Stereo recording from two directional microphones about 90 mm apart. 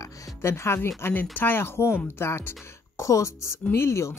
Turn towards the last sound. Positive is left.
turn(degrees=30)  # may be behind; listen again after turning